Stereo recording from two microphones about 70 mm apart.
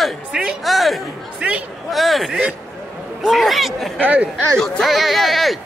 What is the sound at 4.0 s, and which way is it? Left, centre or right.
Speech, right.